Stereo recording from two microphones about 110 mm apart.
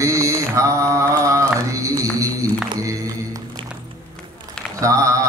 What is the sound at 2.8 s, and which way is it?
Music, 30° right (ahead or behind).